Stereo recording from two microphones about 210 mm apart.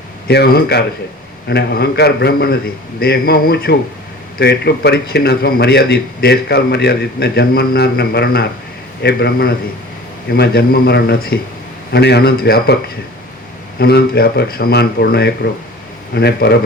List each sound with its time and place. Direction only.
0.3 s a man's voice: 50° left (ahead or behind)
13.7 s a man's voice: 50° left (ahead or behind)